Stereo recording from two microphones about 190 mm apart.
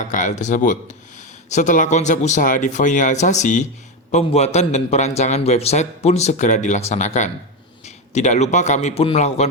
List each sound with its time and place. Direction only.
0.0 s a man's voice: 40° left (ahead or behind)